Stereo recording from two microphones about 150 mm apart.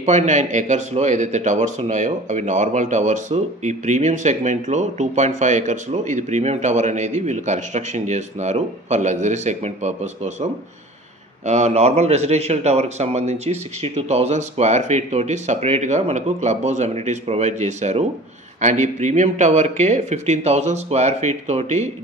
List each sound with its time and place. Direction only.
0.0 s speech: 50° right (ahead or behind)